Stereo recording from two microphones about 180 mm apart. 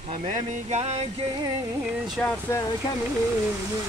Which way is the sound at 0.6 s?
40° right (ahead or behind).